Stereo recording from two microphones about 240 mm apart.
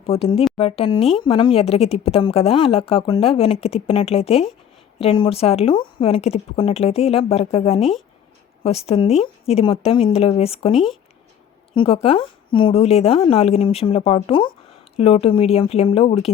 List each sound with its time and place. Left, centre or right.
0.0 s speech: left
7.8 s speech: centre
8.6 s speech: left